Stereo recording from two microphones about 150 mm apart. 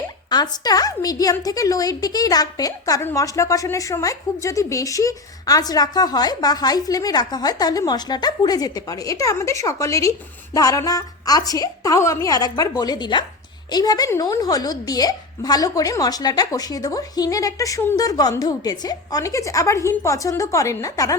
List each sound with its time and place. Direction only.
0.3 s a woman's voice: 25° left (ahead or behind)